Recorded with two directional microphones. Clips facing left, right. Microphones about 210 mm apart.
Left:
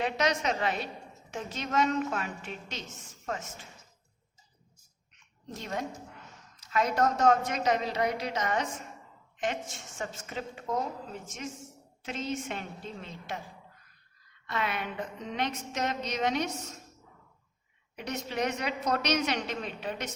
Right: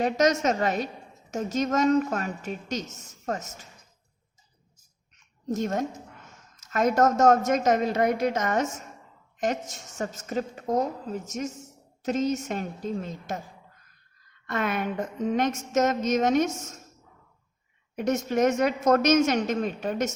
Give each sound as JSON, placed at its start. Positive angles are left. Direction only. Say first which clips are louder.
{"t": 0.0, "sound": "a woman's voice", "louder": "right 6 dB", "side_deg": -45}
{"t": 5.1, "sound": "a sound", "louder": "right 14 dB", "side_deg": -45}
{"t": 6.6, "sound": "a woman's voice", "louder": "right 5 dB", "side_deg": -45}
{"t": 14.4, "sound": "a woman's voice", "louder": "right 6 dB", "side_deg": -50}
{"t": 17.9, "sound": "a woman's voice", "louder": "right 9 dB", "side_deg": -45}